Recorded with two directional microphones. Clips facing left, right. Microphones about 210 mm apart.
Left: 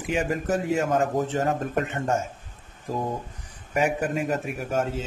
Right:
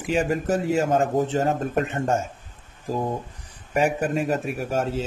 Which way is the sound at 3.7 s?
30° right (ahead or behind).